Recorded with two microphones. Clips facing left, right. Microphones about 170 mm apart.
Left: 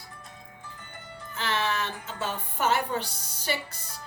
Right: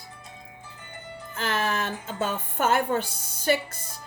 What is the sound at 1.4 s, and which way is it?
A woman's voice, 50° right (ahead or behind).